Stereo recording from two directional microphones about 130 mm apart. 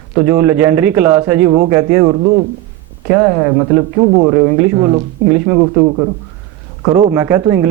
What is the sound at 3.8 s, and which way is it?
Speech, 20° right (ahead or behind).